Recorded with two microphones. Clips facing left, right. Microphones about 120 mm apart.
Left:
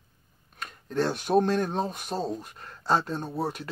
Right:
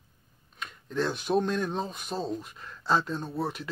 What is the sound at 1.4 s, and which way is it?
Speech, 55° left (ahead or behind).